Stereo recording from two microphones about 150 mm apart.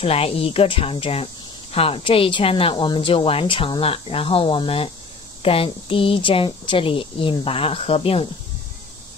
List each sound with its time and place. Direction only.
0.0 s speech: 40° left (ahead or behind)